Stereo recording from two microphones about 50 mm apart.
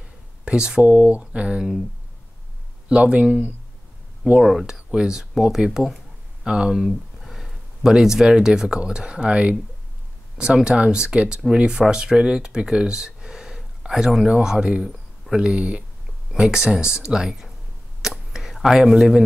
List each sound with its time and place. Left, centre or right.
0.5 s speech: centre
0.8 s speech: right
2.9 s speech: right
4.4 s speech: centre
4.6 s speech: centre
6.4 s a sound: centre
7.8 s speech: centre
18.0 s a sound: centre